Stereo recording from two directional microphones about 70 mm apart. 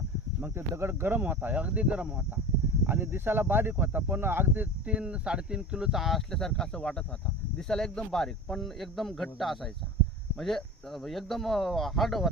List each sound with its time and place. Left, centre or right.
0.4 s speech: right; by 2.2 s centre
2.8 s speech: right; by 12.3 s centre